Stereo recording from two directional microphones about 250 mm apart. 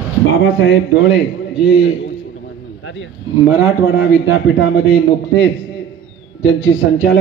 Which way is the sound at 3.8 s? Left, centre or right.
Left.